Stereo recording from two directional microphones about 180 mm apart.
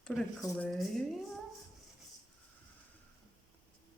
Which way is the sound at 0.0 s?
Centre (ahead or behind).